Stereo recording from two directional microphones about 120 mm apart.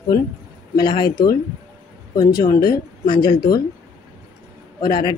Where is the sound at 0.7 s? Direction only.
40° left (ahead or behind).